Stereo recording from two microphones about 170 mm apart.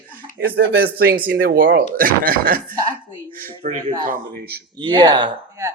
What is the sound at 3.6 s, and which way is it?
Speech, 45° right (ahead or behind).